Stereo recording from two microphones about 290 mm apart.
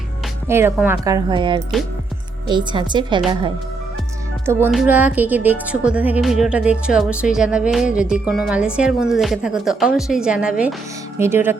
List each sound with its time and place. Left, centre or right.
0.4 s speech: centre